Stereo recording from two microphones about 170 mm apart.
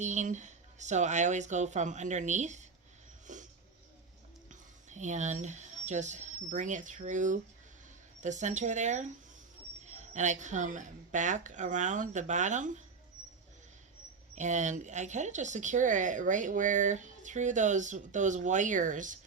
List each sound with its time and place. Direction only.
0.0 s speech: 45° right (ahead or behind)
3.3 s a sound: 45° right (ahead or behind)
4.4 s speech: 45° right (ahead or behind)
14.3 s speech: 45° right (ahead or behind)